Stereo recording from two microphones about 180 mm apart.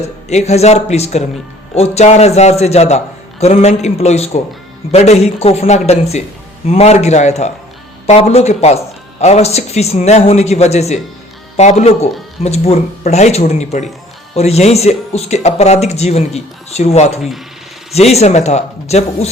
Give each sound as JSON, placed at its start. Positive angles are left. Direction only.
{"t": 0.3, "sound": "speech", "side_deg": 35}